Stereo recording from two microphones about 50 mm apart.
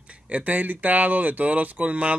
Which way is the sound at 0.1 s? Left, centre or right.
Right.